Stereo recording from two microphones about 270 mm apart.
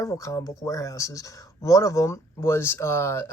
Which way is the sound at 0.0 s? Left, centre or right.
Centre.